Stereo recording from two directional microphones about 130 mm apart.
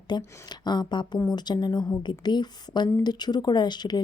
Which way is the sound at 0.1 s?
35° left (ahead or behind).